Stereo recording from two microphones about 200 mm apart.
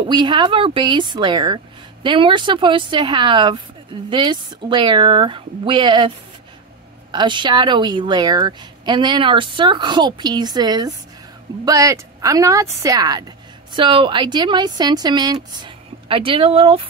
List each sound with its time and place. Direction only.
0.0 s a woman's voice: 25° right (ahead or behind)